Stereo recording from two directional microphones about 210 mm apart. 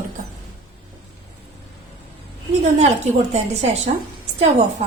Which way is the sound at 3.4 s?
30° right (ahead or behind).